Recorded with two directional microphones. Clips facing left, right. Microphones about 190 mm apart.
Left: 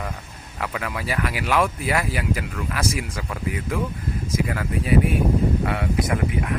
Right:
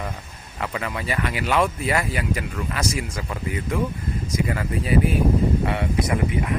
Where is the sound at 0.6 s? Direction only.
Centre (ahead or behind).